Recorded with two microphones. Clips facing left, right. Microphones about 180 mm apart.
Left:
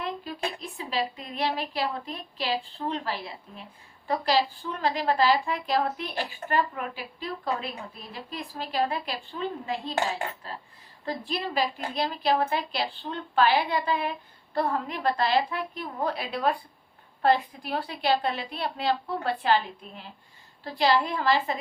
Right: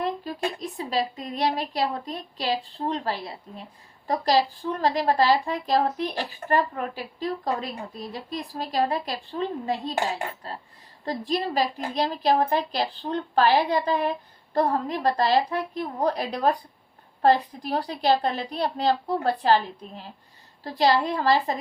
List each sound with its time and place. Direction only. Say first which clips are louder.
0.6 s a woman's voice: right 3 dB; 40° right (ahead or behind)
11.0 s a woman's voice: right 4 dB; 40° right (ahead or behind)
20.7 s a woman's voice: right 2 dB; 40° right (ahead or behind)